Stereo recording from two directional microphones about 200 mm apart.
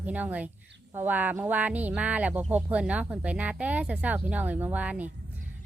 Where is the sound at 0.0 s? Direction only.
10° right (ahead or behind).